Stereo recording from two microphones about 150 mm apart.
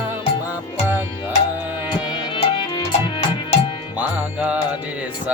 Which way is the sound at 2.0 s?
30° left (ahead or behind).